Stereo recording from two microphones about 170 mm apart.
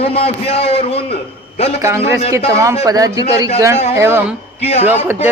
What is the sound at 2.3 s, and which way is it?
A man's voice, 20° right (ahead or behind).